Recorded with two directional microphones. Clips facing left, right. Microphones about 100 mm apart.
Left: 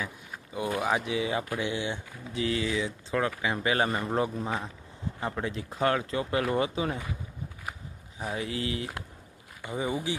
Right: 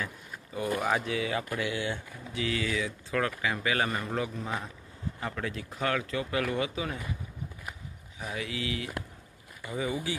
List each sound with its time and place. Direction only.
0.5 s speech: 15° left (ahead or behind); by 7.0 s 35° left (ahead or behind)
8.2 s speech: 35° left (ahead or behind)